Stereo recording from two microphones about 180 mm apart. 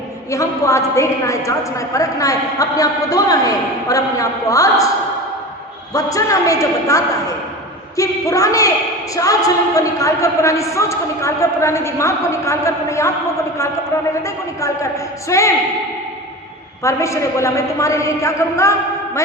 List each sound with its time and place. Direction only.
0.3 s a woman's voice: 15° left (ahead or behind)
5.9 s a man's voice: 20° left (ahead or behind)
16.8 s a woman's voice: 15° left (ahead or behind)